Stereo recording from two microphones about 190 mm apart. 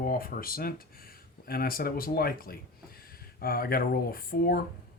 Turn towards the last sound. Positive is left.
turn(degrees=50)  # may be behind; listen again after turning